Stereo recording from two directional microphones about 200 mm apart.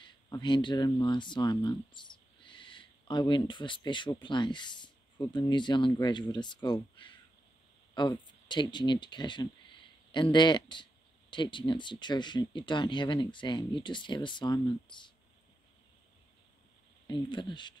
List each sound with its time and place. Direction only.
0.0 s speech: 25° left (ahead or behind)
17.1 s speech: 20° left (ahead or behind)